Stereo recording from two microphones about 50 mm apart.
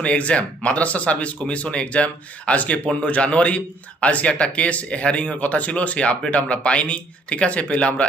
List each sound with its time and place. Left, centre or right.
0.0 s speech: left